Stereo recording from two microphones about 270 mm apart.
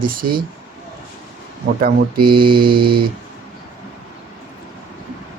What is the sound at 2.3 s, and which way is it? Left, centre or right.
Mantra, centre.